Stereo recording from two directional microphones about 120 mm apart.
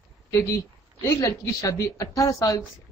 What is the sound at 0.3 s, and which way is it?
Speech, 25° left (ahead or behind).